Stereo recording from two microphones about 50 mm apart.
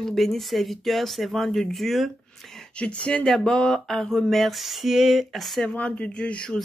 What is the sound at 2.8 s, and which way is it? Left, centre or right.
Speech, left.